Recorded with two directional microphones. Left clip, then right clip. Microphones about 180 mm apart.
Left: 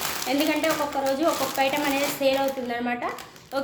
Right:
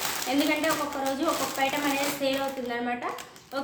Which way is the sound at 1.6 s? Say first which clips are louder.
Left 4 dB; 35° left (ahead or behind).